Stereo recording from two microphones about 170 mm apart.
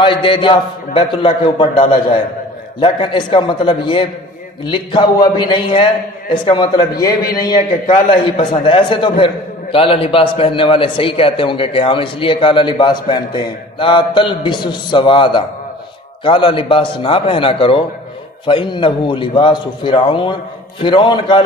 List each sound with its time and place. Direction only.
0.0 s a man's voice: 30° left (ahead or behind)